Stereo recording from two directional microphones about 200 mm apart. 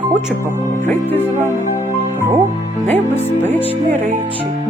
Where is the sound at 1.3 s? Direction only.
10° right (ahead or behind).